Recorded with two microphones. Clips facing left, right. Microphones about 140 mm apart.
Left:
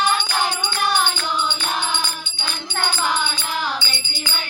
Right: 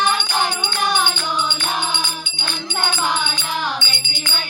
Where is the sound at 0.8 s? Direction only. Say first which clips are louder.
Right 1 dB; 20° right (ahead or behind).